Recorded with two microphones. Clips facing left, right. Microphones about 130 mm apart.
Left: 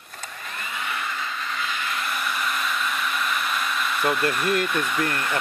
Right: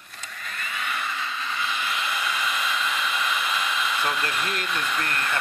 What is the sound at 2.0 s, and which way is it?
Hair dryer, centre (ahead or behind).